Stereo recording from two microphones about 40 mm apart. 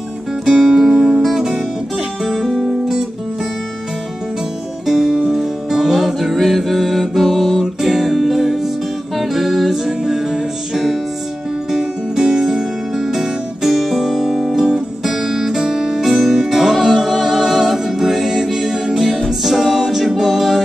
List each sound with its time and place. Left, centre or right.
0.5 s music: centre
0.9 s music: centre
2.2 s music: centre
4.8 s music: centre
9.8 s music: centre
20.2 s a capella: centre